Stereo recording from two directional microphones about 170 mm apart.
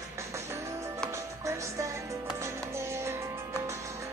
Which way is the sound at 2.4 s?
15° right (ahead or behind).